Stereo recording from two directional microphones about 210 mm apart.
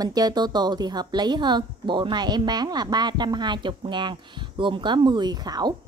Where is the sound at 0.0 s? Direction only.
20° right (ahead or behind).